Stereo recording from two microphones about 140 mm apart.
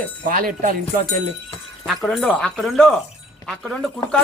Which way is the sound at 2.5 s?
Centre (ahead or behind).